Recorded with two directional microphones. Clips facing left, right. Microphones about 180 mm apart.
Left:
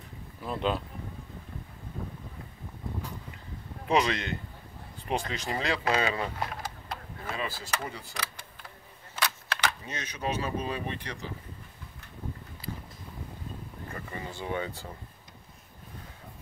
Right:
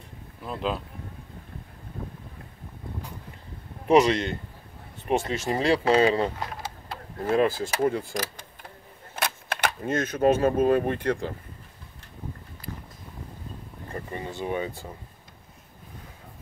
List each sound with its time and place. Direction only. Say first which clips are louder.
0.4 s speech: even; centre (ahead or behind)
3.8 s speech: right 7 dB; 25° right (ahead or behind)
7.2 s speech: right 15 dB; 50° right (ahead or behind)
13.9 s a sound: right 6 dB; 25° right (ahead or behind)